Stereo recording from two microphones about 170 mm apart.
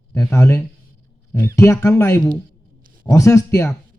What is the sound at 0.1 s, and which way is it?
A man's voice, 15° left (ahead or behind).